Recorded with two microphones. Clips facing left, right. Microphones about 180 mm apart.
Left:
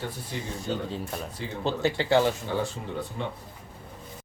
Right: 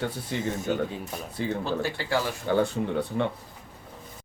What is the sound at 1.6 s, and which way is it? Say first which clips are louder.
Speech: left 3 dB; 20° left (ahead or behind).